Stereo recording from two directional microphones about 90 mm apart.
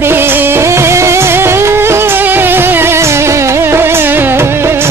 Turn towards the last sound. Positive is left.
turn(degrees=-25)  # may be behind; listen again after turning